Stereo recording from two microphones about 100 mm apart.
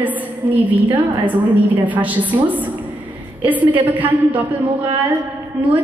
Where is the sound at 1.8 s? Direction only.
15° right (ahead or behind).